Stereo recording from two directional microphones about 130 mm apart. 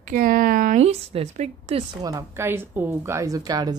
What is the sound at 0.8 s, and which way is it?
Speech, 50° right (ahead or behind).